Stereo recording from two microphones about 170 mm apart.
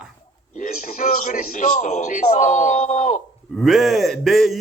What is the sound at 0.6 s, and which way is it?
A man's voice, 50° left (ahead or behind).